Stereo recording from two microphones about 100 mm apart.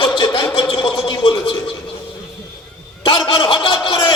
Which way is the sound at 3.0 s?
55° left (ahead or behind).